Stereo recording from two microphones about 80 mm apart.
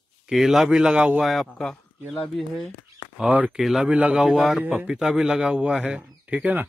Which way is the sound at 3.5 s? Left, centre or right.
Centre.